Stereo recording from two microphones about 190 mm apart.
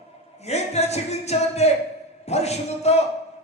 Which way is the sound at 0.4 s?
35° left (ahead or behind).